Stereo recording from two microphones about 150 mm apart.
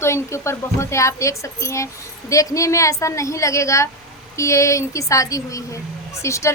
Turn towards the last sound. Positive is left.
turn(degrees=20)  # may be behind; listen again after turning